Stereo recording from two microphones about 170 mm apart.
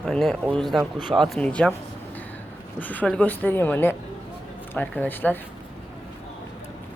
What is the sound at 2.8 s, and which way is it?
Speech, 10° left (ahead or behind).